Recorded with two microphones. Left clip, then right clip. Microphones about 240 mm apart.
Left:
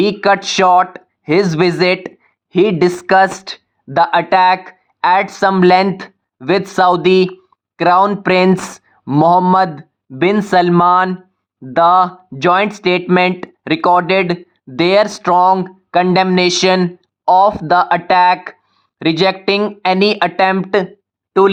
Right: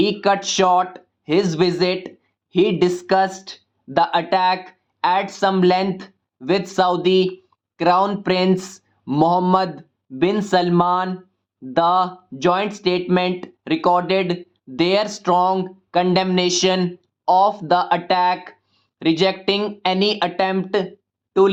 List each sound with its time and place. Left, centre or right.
0.0 s speech: left